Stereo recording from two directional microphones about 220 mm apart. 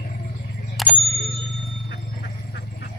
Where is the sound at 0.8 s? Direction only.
Centre (ahead or behind).